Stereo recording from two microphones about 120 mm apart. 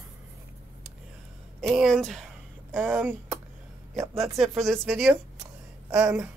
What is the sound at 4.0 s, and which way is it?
Speech, 55° right (ahead or behind).